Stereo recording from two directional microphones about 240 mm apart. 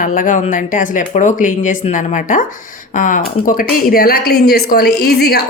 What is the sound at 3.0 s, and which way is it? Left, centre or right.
A woman's voice, left.